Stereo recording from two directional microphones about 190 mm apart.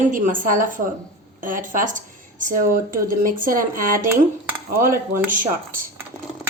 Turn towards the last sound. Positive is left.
turn(degrees=-45)  # may be behind; listen again after turning